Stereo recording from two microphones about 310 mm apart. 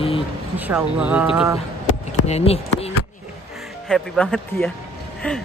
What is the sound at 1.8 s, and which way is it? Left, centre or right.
Speech, left.